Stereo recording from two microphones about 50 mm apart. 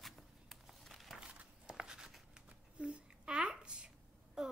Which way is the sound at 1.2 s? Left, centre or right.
Centre.